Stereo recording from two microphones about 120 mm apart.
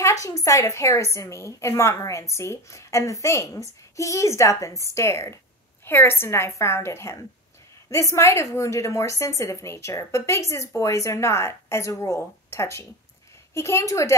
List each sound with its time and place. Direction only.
0.0 s a woman's voice: 25° left (ahead or behind)